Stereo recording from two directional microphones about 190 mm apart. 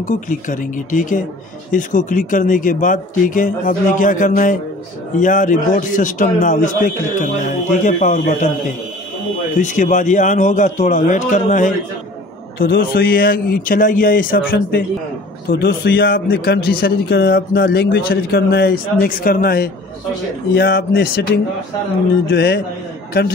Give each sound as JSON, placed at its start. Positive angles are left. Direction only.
{"t": 0.0, "sound": "a man's voice", "side_deg": 45}
{"t": 9.6, "sound": "a man's voice", "side_deg": 40}